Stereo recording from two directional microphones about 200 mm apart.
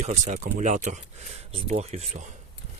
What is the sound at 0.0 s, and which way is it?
Speech, 35° right (ahead or behind).